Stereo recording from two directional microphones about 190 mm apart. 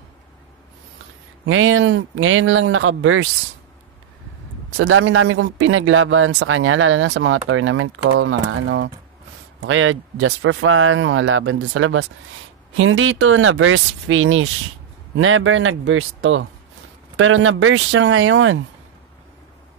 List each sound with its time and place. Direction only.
1.4 s speech: 90° right
4.7 s speech: 90° right